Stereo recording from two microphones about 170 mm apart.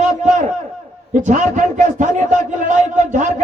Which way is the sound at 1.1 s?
45° right (ahead or behind).